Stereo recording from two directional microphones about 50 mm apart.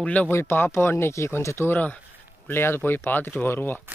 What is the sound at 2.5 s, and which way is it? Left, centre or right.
Speech, left.